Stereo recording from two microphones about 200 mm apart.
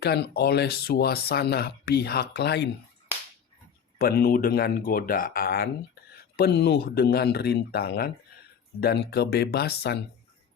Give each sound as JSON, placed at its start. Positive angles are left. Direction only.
{"t": 0.0, "sound": "speech", "side_deg": 55}
{"t": 3.9, "sound": "speech", "side_deg": 50}